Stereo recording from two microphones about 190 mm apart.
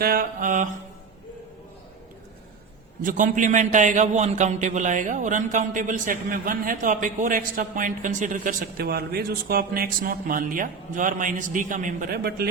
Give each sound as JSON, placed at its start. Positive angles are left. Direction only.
{"t": 0.0, "sound": "a man's voice", "side_deg": -50}
{"t": 3.0, "sound": "a man's voice", "side_deg": -45}